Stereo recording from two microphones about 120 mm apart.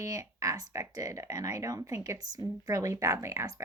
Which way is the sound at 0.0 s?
30° right (ahead or behind).